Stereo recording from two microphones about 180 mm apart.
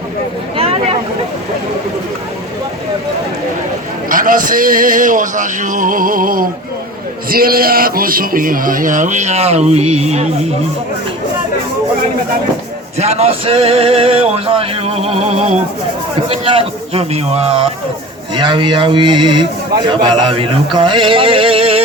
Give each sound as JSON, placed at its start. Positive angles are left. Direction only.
{"t": 0.5, "sound": "a sound", "side_deg": -30}
{"t": 4.1, "sound": "a man's voice", "side_deg": -50}
{"t": 13.0, "sound": "speech", "side_deg": -35}
{"t": 16.3, "sound": "speech", "side_deg": -30}